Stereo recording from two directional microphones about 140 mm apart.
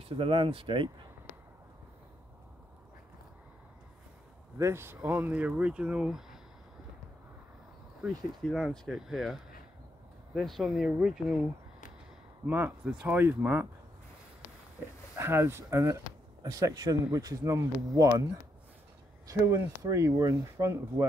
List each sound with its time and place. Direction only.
0.0 s speech: 40° right (ahead or behind)
4.6 s speech: 20° right (ahead or behind)
8.0 s speech: centre (ahead or behind)
12.4 s speech: 15° right (ahead or behind)
15.1 s speech: 20° right (ahead or behind)
19.3 s speech: 20° right (ahead or behind)